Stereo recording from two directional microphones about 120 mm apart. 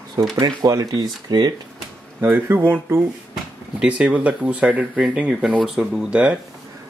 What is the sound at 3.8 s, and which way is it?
Speech, 10° right (ahead or behind).